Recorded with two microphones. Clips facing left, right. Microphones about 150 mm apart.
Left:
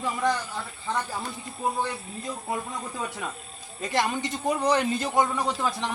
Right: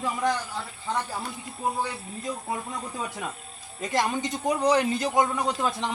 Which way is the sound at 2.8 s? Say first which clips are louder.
Even; 10° right (ahead or behind).